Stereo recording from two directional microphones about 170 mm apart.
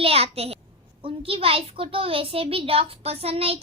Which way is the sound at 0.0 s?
35° right (ahead or behind).